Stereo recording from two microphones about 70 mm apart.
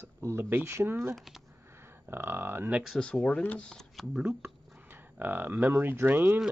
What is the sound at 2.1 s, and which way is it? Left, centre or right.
Speech, right.